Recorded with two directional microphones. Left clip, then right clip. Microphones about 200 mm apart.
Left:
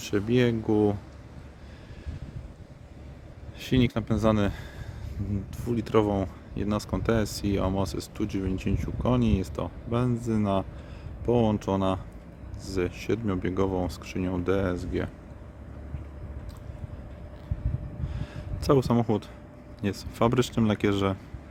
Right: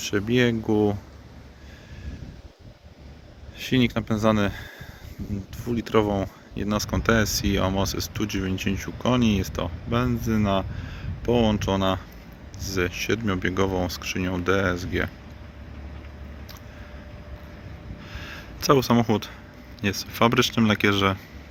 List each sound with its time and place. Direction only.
0.0 s speech: 5° left (ahead or behind)
3.6 s speech: 5° left (ahead or behind)
18.1 s a sound: 15° left (ahead or behind)
19.8 s speech: 15° left (ahead or behind)